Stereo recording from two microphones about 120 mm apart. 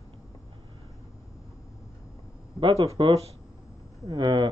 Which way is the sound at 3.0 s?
45° right (ahead or behind).